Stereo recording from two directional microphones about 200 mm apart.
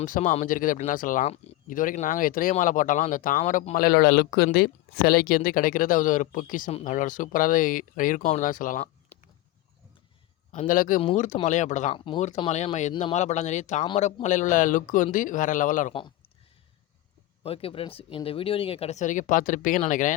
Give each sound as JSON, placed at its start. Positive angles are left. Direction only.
{"t": 0.0, "sound": "speech", "side_deg": 40}
{"t": 10.5, "sound": "speech", "side_deg": 40}
{"t": 11.9, "sound": "speech", "side_deg": 25}
{"t": 17.4, "sound": "speech", "side_deg": 30}